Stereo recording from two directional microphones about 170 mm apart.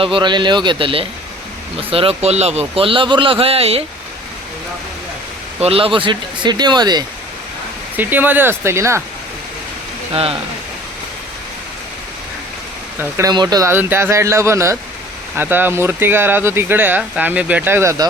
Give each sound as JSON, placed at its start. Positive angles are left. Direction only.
{"t": 0.0, "sound": "a man's voice", "side_deg": -30}
{"t": 5.5, "sound": "speech", "side_deg": -35}
{"t": 7.9, "sound": "speech", "side_deg": -10}
{"t": 10.1, "sound": "speech", "side_deg": -35}
{"t": 13.0, "sound": "speech", "side_deg": -15}